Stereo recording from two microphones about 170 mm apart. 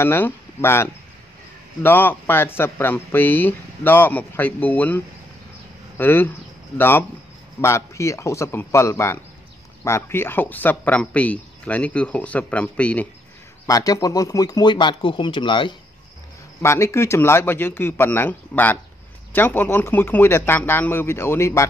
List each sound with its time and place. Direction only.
0.0 s speech: 15° left (ahead or behind)
13.7 s speech: 20° left (ahead or behind)
16.6 s speech: 15° left (ahead or behind)